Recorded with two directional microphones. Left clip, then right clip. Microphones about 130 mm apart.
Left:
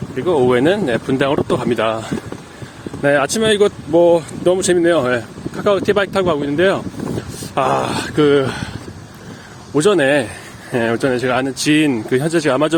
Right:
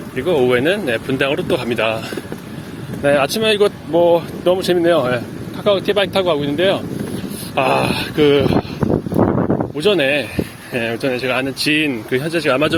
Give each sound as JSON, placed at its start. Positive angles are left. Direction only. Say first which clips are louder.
{"t": 0.3, "sound": "speech", "louder": "left 1 dB", "side_deg": 45}
{"t": 3.0, "sound": "speech", "louder": "even", "side_deg": 50}
{"t": 9.7, "sound": "speech", "louder": "left 4 dB", "side_deg": 60}